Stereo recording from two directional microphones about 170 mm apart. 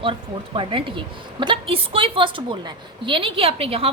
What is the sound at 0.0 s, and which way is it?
A woman's voice, 30° right (ahead or behind).